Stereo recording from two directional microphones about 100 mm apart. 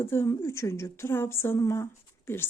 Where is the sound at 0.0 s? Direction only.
25° left (ahead or behind).